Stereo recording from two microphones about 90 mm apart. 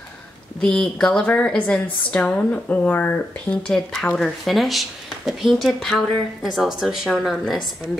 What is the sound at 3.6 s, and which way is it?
Speech, 5° left (ahead or behind).